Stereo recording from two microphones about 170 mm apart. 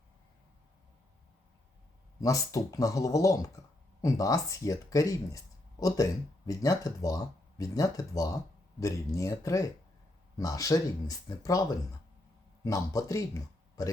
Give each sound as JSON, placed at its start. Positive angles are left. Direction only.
{"t": 2.2, "sound": "speech", "side_deg": 20}
{"t": 12.6, "sound": "speech", "side_deg": 20}